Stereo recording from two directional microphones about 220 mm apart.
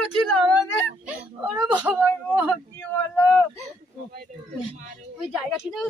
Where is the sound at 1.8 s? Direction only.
10° right (ahead or behind).